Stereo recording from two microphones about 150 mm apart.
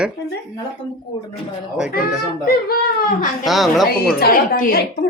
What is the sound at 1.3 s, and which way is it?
Speech, 5° right (ahead or behind).